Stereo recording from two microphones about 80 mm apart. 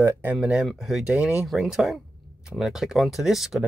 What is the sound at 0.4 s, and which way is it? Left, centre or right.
Speech, centre.